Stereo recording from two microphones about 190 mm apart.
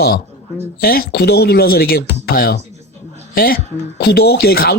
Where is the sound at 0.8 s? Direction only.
50° left (ahead or behind).